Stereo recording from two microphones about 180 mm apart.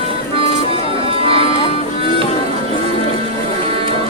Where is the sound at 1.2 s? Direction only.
30° right (ahead or behind).